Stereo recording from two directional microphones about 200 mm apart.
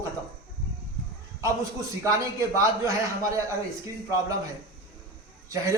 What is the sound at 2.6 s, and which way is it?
Speech, 15° right (ahead or behind).